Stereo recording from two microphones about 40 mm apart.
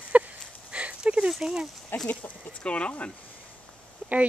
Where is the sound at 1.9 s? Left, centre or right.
Left.